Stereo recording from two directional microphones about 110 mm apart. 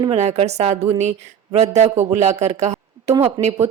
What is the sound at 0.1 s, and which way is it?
A woman's voice, 80° right.